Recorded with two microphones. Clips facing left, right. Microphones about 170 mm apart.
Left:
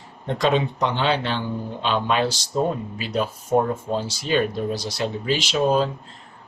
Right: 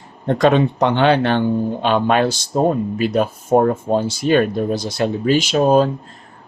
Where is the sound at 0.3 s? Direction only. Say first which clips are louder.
Right 7 dB; 55° right (ahead or behind).